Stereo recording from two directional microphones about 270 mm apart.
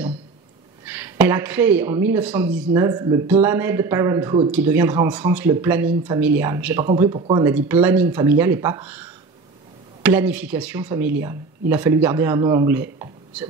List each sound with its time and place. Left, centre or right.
0.8 s speech: centre
7.0 s speech: centre
7.4 s speech: centre
10.0 s speech: centre